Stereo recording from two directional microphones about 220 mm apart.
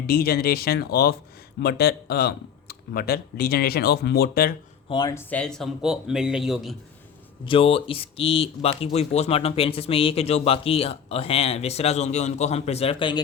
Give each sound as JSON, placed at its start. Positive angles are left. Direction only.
{"t": 0.1, "sound": "speech", "side_deg": 45}
{"t": 4.9, "sound": "speech", "side_deg": 20}
{"t": 5.3, "sound": "a man's voice", "side_deg": 5}
{"t": 7.4, "sound": "speech", "side_deg": 25}